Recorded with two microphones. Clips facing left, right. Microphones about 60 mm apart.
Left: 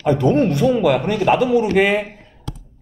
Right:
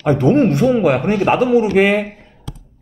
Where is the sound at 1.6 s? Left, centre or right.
Centre.